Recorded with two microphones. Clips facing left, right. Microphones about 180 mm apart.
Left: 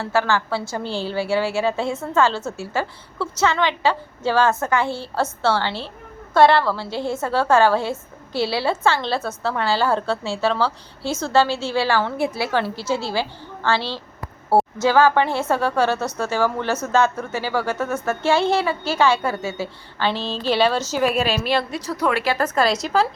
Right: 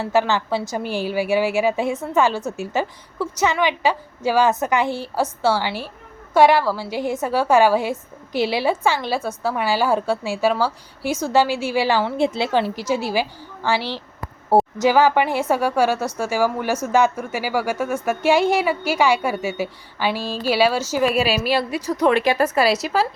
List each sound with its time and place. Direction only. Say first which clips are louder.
0.0 s a woman's voice: right 2 dB; 20° right (ahead or behind)